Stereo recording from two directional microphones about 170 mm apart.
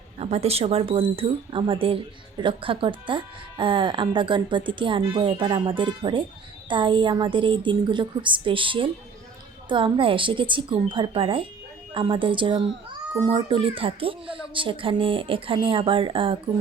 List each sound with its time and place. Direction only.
0.2 s speech: 40° right (ahead or behind)